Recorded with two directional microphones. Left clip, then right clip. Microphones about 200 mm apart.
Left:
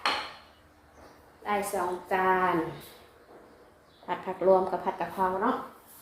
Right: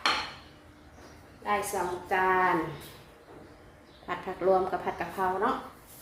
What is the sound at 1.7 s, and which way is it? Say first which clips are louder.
Speech: left 1 dB; 15° left (ahead or behind).